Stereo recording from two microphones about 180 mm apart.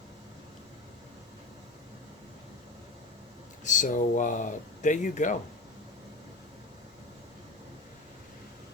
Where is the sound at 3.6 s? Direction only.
45° left (ahead or behind).